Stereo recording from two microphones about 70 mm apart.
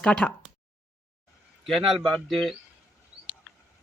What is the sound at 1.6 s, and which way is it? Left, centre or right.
Speech, centre.